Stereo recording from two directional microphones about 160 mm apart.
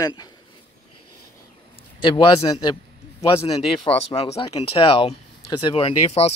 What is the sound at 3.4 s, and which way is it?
Speech, 40° left (ahead or behind).